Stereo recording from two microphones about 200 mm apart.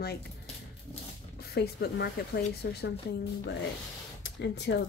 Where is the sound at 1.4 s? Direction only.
55° left (ahead or behind).